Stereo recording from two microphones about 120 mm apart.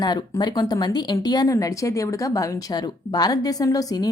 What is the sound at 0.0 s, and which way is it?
A woman's voice, 35° left (ahead or behind).